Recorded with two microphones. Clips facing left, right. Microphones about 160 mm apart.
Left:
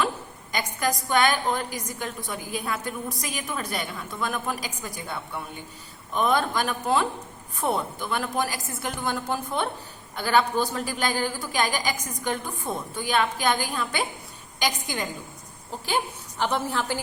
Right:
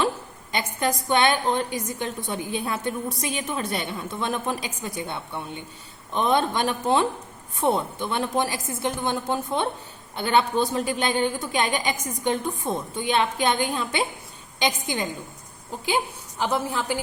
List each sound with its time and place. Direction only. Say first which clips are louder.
0.5 s a woman's voice: right 2 dB; 25° right (ahead or behind)
16.4 s a woman's voice: right 1 dB; 10° right (ahead or behind)